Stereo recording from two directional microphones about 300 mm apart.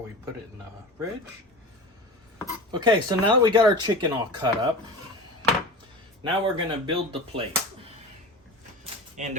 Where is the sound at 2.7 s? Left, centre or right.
Centre.